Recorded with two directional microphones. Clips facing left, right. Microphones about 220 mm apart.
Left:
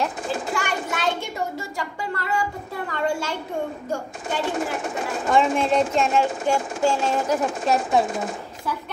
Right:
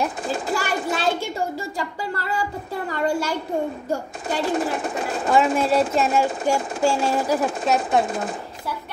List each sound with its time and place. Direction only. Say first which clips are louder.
0.5 s a sound: right 3 dB; 35° right (ahead or behind)
1.8 s a child's voice: right 1 dB; 30° right (ahead or behind)
5.3 s speech: right 1 dB; 5° right (ahead or behind)